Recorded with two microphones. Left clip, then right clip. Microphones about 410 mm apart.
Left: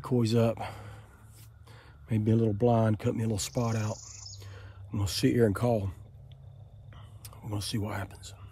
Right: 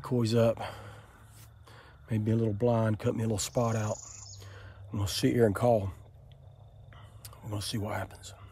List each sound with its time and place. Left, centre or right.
0.0 s speech: centre
7.2 s speech: centre